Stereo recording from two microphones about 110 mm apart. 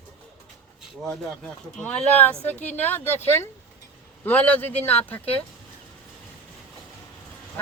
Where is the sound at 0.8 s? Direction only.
Centre (ahead or behind); by 4.9 s 15° left (ahead or behind).